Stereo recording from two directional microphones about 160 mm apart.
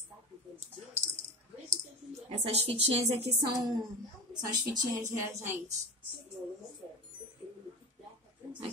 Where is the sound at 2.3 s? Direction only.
40° right (ahead or behind).